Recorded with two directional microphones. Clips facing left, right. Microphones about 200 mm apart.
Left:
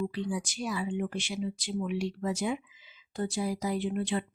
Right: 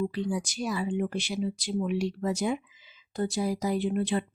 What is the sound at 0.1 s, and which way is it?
Speech, 40° right (ahead or behind).